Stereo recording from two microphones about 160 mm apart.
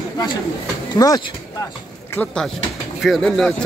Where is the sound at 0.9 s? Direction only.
20° left (ahead or behind).